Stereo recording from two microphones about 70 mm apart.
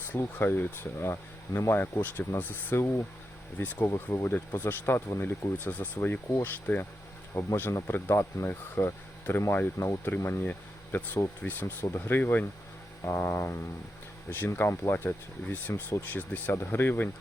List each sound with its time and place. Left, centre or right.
0.1 s speech: left
5.2 s speech: left
7.7 s speech: left
7.9 s speech: left
9.8 s speech: left
10.2 s speech: left
13.0 s speech: left